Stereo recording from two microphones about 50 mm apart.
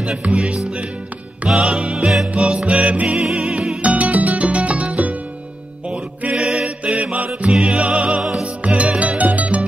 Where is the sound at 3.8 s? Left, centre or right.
Right.